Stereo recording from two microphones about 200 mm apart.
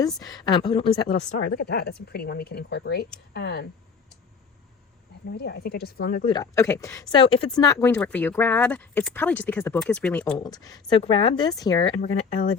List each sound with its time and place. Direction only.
0.2 s speech: 20° left (ahead or behind)
1.0 s speech: 45° left (ahead or behind)
5.4 s speech: 55° left (ahead or behind)
6.2 s speech: 20° left (ahead or behind)
10.3 s speech: 20° left (ahead or behind)